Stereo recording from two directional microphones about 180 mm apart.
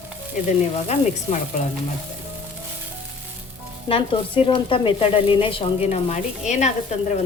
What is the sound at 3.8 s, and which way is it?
Speech, 30° left (ahead or behind).